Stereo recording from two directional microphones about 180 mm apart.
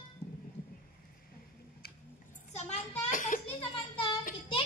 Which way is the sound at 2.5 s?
40° left (ahead or behind).